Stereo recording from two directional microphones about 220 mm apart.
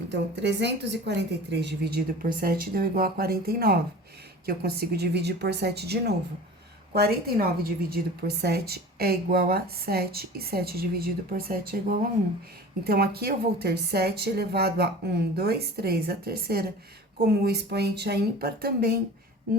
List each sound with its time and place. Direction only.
0.1 s a woman's voice: 50° right (ahead or behind)
12.8 s a woman's voice: 45° right (ahead or behind)